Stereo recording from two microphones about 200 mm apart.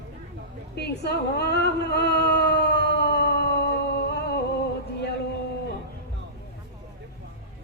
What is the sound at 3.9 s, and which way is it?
Music, 55° left (ahead or behind).